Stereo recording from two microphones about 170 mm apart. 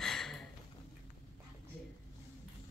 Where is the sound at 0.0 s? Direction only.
Centre (ahead or behind).